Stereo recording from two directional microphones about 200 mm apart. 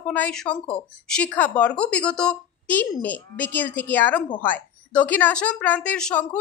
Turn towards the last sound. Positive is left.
turn(degrees=5)  # may be behind; listen again after turning